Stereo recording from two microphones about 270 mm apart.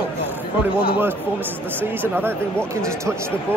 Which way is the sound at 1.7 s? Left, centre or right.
Centre.